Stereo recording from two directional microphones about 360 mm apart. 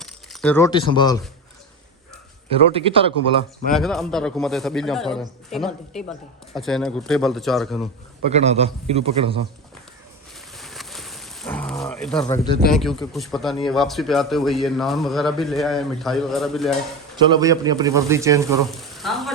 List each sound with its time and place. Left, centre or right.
0.0 s speech: centre
2.7 s a man's voice: centre
3.7 s speech: centre
8.3 s a man's voice: centre
10.5 s a sound: centre
12.7 s speech: centre
17.2 s a man's voice: centre